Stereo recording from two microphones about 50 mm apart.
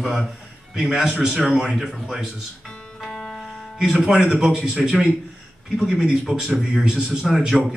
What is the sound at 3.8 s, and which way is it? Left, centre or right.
A man's voice, centre.